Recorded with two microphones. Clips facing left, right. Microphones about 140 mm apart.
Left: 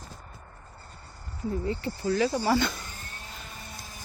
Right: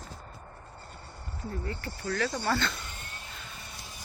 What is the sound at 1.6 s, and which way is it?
Speech, 20° left (ahead or behind).